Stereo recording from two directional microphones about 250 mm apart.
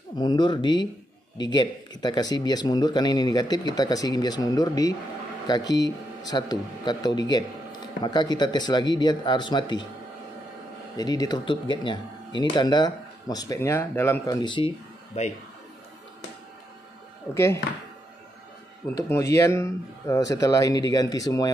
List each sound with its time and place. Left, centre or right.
0.2 s speech: centre
11.0 s speech: centre
17.3 s speech: centre
18.9 s speech: centre